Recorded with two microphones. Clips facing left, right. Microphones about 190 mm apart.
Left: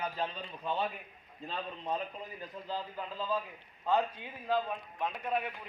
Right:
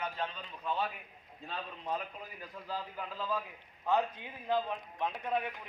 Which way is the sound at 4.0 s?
20° right (ahead or behind).